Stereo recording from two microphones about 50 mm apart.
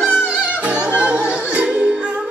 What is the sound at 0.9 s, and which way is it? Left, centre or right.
Music, right.